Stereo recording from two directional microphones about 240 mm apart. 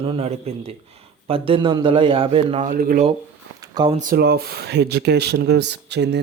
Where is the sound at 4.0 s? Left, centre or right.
Right.